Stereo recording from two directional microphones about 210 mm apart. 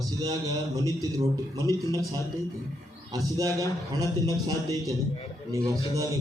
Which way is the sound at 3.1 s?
15° right (ahead or behind).